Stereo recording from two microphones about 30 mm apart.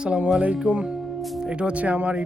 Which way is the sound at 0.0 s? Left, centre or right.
Right.